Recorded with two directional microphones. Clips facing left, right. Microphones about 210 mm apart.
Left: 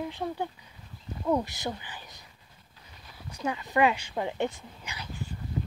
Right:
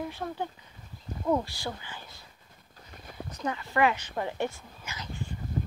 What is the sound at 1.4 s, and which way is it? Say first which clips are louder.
Speech: left 2 dB; 20° left (ahead or behind).